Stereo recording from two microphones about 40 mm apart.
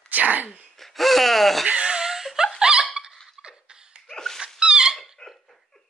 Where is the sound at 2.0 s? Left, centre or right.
Centre.